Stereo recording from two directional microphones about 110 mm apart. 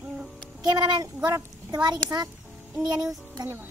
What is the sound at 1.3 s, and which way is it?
Speech, 40° right (ahead or behind).